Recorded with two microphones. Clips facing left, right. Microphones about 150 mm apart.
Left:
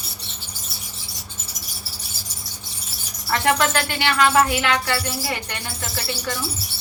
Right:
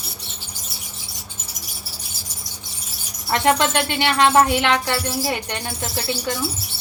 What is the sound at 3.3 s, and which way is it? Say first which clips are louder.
Music: right 2 dB; 25° right (ahead or behind).